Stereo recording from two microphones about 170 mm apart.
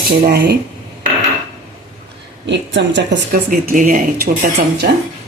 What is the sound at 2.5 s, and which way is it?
Speech, 90° right.